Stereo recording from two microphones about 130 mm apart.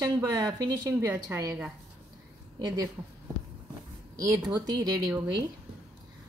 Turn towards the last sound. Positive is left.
turn(degrees=-35)  # may be behind; listen again after turning